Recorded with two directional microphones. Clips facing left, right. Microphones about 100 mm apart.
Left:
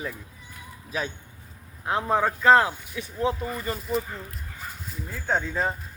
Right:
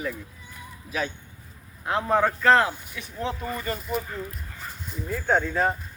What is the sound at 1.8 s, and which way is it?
Speech, 20° left (ahead or behind).